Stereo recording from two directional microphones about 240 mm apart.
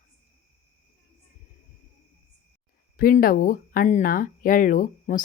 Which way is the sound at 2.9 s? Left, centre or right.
Left.